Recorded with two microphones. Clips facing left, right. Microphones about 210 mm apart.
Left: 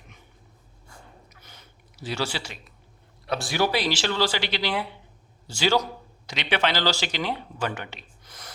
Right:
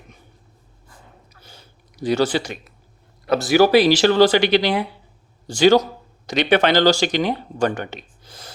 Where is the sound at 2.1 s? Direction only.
50° right (ahead or behind).